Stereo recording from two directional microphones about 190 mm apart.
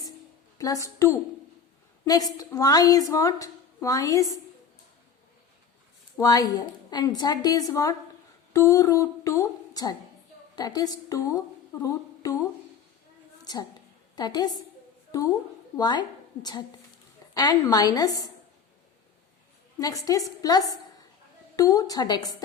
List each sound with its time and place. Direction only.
0.6 s a woman's voice: 15° left (ahead or behind)
6.1 s a woman's voice: 20° left (ahead or behind)
13.4 s a sound: 20° left (ahead or behind)
14.2 s a woman's voice: 20° left (ahead or behind)
15.8 s a woman's voice: 20° left (ahead or behind)
19.8 s a woman's voice: 20° left (ahead or behind)